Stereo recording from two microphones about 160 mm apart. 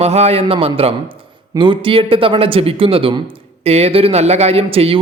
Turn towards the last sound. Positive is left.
turn(degrees=-35)  # may be behind; listen again after turning